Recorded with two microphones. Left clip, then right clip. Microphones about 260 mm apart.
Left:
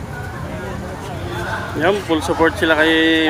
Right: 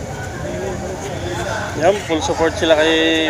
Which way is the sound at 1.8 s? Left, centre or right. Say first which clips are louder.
Right 1 dB; left.